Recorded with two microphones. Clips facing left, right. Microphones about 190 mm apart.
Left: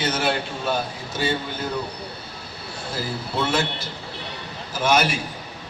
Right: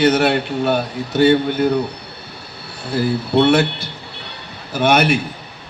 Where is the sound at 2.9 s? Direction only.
65° right (ahead or behind).